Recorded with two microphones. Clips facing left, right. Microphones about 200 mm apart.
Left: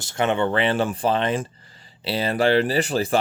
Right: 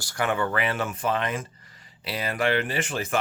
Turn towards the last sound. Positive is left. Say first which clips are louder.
# left 6 dB
turn(degrees=35)  # may be behind; listen again after turning